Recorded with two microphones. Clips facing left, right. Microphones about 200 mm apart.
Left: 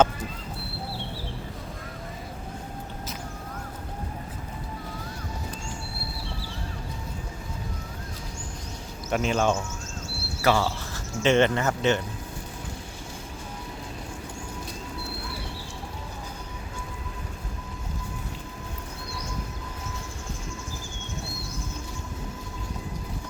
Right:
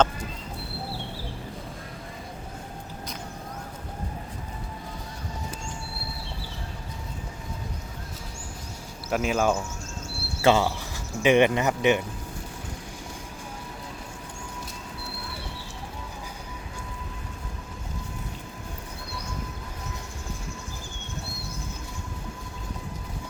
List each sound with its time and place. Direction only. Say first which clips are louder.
9.0 s speech: even; 5° right (ahead or behind)
10.4 s speech: right 3 dB; 20° right (ahead or behind)